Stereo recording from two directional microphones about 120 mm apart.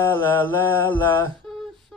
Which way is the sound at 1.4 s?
5° left (ahead or behind).